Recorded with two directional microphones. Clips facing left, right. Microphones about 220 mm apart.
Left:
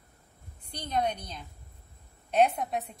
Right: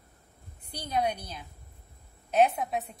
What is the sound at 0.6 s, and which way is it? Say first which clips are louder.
A woman's voice: even; 10° right (ahead or behind).